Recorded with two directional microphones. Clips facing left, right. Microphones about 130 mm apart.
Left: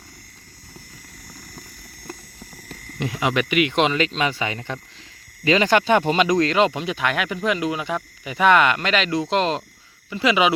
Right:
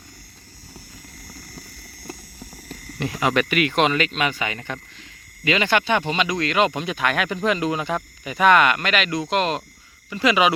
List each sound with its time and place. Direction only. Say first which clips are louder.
3.0 s speech: right 1 dB; 15° left (ahead or behind)